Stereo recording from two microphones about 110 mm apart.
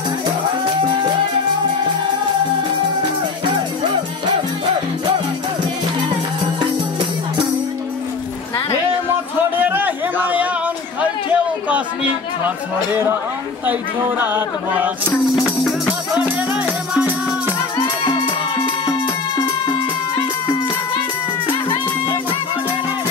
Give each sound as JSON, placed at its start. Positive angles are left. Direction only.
{"t": 6.6, "sound": "music", "side_deg": -45}
{"t": 9.6, "sound": "a sound", "side_deg": -15}
{"t": 11.0, "sound": "chatter", "side_deg": -10}
{"t": 13.7, "sound": "choir", "side_deg": -20}
{"t": 16.2, "sound": "music", "side_deg": -10}
{"t": 18.0, "sound": "music", "side_deg": 50}